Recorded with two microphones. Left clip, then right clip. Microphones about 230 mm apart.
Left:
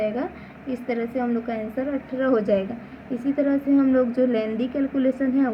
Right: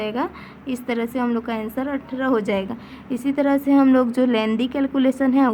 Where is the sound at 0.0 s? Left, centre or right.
Right.